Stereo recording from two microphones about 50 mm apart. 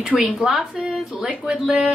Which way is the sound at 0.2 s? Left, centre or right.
Centre.